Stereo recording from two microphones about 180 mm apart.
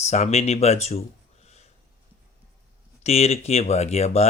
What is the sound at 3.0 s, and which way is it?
Speech, 35° left (ahead or behind).